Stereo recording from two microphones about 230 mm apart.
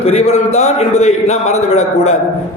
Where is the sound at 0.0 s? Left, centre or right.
Left.